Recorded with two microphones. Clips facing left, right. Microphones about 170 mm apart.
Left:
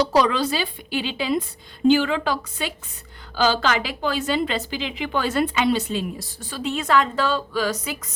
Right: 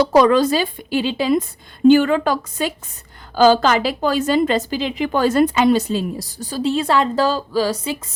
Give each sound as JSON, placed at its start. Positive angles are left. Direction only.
{"t": 0.0, "sound": "a woman's voice", "side_deg": -50}